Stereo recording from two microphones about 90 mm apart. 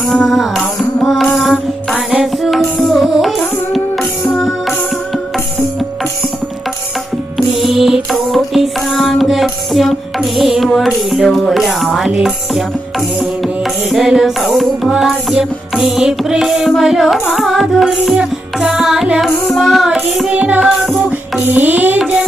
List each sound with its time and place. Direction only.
0.0 s music: 5° left (ahead or behind)
7.3 s music: centre (ahead or behind)
13.9 s music: 5° right (ahead or behind)
21.4 s music: 20° right (ahead or behind)